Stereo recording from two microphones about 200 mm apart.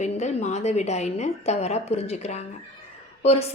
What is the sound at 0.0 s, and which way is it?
A woman's voice, 35° left (ahead or behind).